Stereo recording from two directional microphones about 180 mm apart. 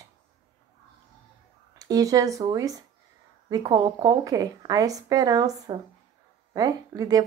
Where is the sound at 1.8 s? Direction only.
20° right (ahead or behind).